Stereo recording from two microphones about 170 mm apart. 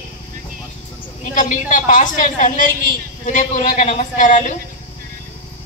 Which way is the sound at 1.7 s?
50° left (ahead or behind).